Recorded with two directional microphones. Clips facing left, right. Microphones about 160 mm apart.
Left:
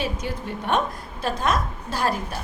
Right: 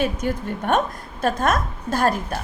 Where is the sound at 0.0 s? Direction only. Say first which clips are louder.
Right 5 dB; 50° right (ahead or behind).